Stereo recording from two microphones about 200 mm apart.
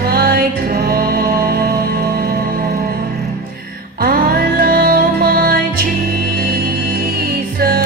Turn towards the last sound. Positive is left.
turn(degrees=-50)  # may be behind; listen again after turning